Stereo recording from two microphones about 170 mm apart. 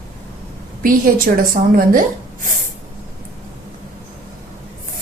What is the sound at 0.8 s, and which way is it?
A woman's voice, 55° right (ahead or behind).